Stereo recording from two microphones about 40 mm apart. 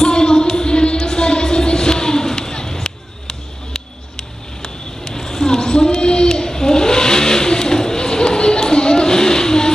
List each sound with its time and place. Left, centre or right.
0.0 s music: centre
0.9 s a sound: centre
6.2 s vehicle: centre